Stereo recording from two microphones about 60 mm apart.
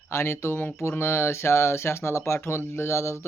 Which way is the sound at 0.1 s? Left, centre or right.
Left.